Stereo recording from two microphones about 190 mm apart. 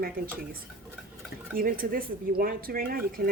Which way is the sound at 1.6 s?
50° right (ahead or behind).